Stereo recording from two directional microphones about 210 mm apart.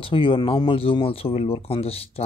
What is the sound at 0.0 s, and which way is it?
Speech, 25° left (ahead or behind).